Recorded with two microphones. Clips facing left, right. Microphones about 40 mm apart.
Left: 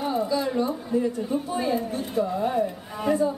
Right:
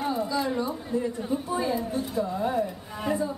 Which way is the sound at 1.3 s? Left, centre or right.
Centre.